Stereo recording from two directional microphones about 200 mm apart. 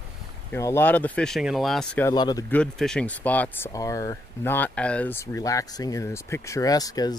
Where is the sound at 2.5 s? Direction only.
5° left (ahead or behind).